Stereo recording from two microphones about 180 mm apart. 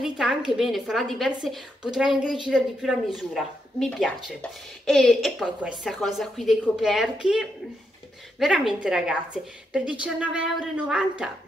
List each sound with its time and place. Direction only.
0.0 s speech: 5° right (ahead or behind)